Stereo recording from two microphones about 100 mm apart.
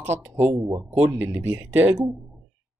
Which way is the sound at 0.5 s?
30° right (ahead or behind).